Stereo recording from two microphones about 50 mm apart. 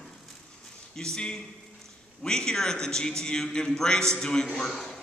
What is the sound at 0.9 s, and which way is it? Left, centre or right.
A man's voice, centre.